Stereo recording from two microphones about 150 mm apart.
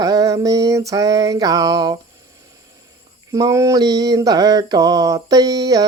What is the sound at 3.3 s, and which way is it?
Mantra, 20° right (ahead or behind).